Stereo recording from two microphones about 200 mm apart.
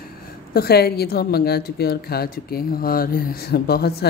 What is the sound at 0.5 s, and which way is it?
A woman's voice, 50° left (ahead or behind).